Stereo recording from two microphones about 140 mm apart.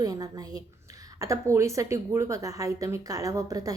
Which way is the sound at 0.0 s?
25° right (ahead or behind).